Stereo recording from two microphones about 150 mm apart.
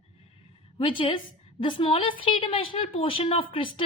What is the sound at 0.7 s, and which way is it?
A woman's voice, 35° left (ahead or behind).